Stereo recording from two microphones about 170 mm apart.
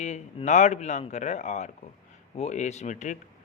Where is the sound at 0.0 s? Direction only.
45° left (ahead or behind).